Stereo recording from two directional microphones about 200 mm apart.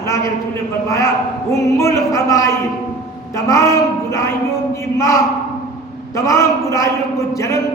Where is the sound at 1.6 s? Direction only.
15° left (ahead or behind).